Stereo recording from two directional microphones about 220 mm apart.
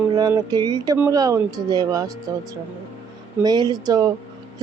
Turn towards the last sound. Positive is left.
turn(degrees=-20)  # may be behind; listen again after turning